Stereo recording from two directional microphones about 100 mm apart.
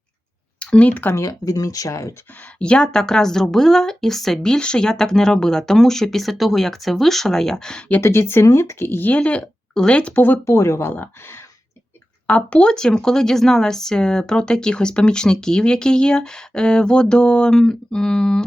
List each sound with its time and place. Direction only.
0.6 s speech: 10° left (ahead or behind)
1.1 s speech: 35° left (ahead or behind)
2.4 s a woman's voice: 10° left (ahead or behind)
7.9 s speech: 20° left (ahead or behind)
12.3 s speech: 10° left (ahead or behind)